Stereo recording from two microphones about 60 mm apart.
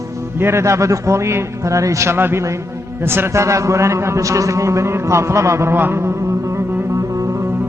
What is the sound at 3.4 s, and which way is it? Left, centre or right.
A man's voice, right.